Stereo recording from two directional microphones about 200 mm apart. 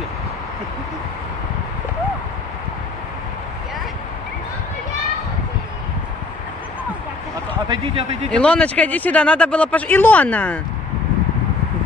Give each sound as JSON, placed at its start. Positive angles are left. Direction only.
{"t": 7.6, "sound": "a man's voice", "side_deg": -25}
{"t": 8.3, "sound": "speech", "side_deg": 5}